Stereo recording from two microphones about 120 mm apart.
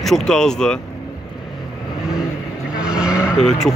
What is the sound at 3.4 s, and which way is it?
Speech, 5° left (ahead or behind).